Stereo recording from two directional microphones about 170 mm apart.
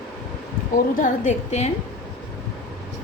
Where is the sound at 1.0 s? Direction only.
45° left (ahead or behind).